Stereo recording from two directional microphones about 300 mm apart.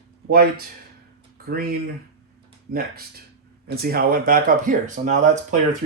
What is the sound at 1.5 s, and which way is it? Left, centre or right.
Speech, right.